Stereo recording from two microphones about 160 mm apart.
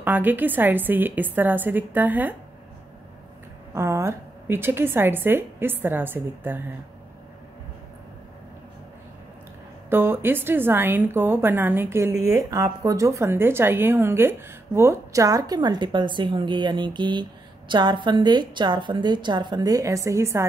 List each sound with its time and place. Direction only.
0.0 s a woman's voice: 10° right (ahead or behind)
3.7 s a woman's voice: 15° right (ahead or behind)
9.8 s a woman's voice: 15° right (ahead or behind)